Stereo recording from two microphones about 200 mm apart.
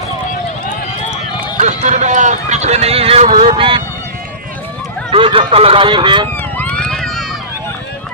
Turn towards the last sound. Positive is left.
turn(degrees=5)  # may be behind; listen again after turning